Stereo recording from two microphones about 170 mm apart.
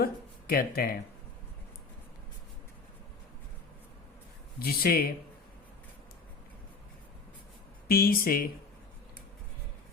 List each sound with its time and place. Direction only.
0.0 s speech: 60° left (ahead or behind)
4.6 s speech: 65° left (ahead or behind)
7.9 s speech: 60° left (ahead or behind)